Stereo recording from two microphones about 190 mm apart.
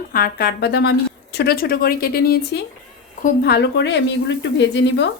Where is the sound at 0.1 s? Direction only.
50° left (ahead or behind).